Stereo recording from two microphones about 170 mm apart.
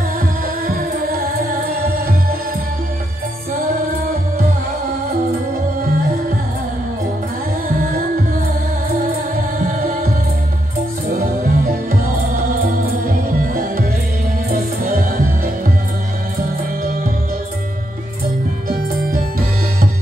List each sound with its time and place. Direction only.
0.7 s music: 60° right (ahead or behind)
11.1 s music: 60° right (ahead or behind)
13.5 s music: 55° right (ahead or behind)
18.7 s music: 60° right (ahead or behind)